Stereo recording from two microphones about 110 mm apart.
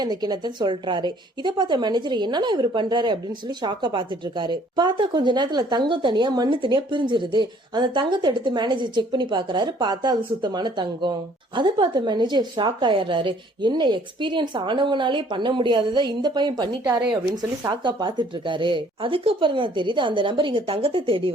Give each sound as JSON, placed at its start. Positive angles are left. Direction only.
{"t": 0.0, "sound": "a woman's voice", "side_deg": -40}